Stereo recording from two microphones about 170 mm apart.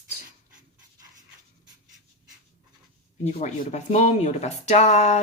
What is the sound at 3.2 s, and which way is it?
Speech, 40° left (ahead or behind).